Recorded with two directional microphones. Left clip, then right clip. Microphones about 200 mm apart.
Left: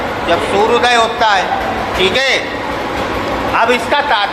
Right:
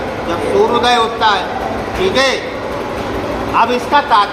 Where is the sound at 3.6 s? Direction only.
15° left (ahead or behind).